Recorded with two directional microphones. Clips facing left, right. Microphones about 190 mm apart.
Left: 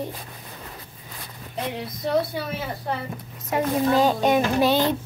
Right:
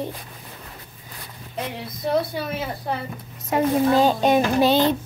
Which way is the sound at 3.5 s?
30° right (ahead or behind).